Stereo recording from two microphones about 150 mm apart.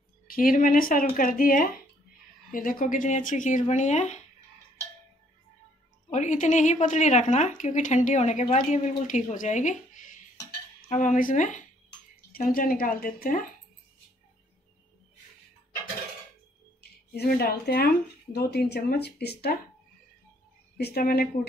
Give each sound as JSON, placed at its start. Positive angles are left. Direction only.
{"t": 0.3, "sound": "speech", "side_deg": 70}
{"t": 2.5, "sound": "speech", "side_deg": 65}
{"t": 6.1, "sound": "a woman's voice", "side_deg": 50}
{"t": 12.3, "sound": "speech", "side_deg": 75}
{"t": 17.1, "sound": "speech", "side_deg": 90}
{"t": 20.7, "sound": "speech", "side_deg": 90}